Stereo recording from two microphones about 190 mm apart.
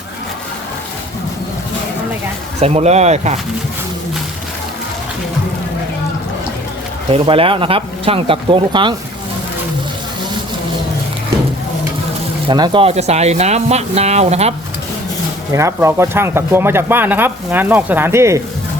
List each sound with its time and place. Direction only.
2.6 s speech: 35° right (ahead or behind)
7.1 s speech: 30° right (ahead or behind)
12.5 s speech: 25° right (ahead or behind)
15.5 s speech: 15° right (ahead or behind)